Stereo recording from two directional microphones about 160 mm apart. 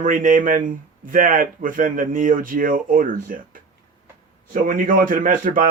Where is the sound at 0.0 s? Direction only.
55° right (ahead or behind).